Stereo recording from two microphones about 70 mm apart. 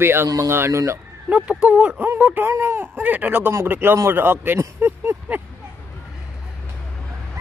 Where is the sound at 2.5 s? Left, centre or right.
Right.